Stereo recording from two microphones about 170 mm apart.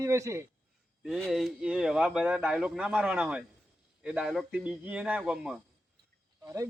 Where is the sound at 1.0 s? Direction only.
Centre (ahead or behind).